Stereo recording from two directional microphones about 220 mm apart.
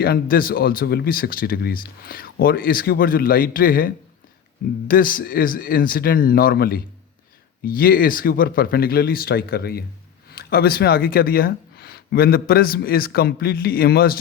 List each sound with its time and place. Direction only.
0.0 s speech: 45° left (ahead or behind)